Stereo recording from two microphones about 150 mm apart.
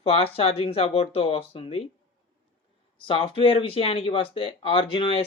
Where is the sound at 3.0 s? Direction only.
35° left (ahead or behind).